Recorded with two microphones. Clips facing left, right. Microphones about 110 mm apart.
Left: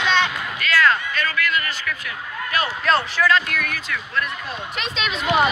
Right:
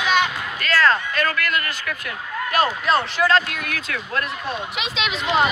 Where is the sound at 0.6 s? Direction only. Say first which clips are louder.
Even; 35° right (ahead or behind).